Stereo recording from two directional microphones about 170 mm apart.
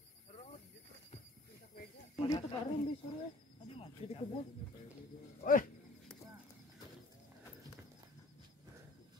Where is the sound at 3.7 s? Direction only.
35° left (ahead or behind).